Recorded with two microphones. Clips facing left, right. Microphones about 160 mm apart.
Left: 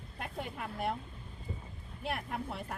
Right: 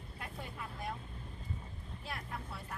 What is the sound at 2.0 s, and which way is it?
Speech, 60° left (ahead or behind).